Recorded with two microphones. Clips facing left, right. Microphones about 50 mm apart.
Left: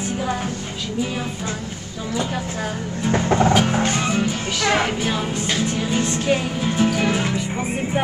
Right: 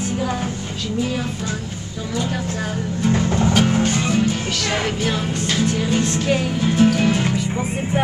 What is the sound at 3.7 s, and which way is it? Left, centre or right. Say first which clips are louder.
Music: right 1 dB; left.